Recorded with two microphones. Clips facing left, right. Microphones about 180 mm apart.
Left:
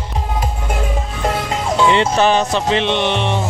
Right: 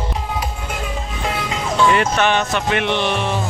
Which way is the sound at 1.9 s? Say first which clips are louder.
Left 3 dB; 30° left (ahead or behind).